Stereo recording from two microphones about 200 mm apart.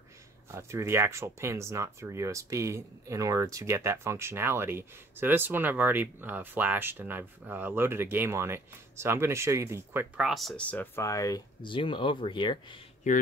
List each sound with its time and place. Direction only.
0.5 s speech: 15° right (ahead or behind); by 12.7 s 25° left (ahead or behind)
13.0 s speech: 40° left (ahead or behind)